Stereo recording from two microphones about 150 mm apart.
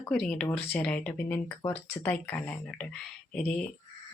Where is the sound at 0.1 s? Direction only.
5° left (ahead or behind).